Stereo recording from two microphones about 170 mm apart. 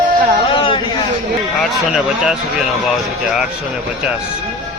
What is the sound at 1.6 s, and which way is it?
Speech, centre (ahead or behind).